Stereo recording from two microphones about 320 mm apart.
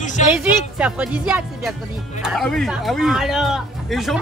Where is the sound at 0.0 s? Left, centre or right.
Left.